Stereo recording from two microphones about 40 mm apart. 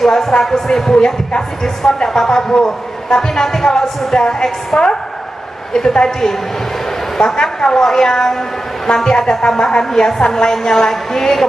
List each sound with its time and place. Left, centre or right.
0.0 s a woman's voice: centre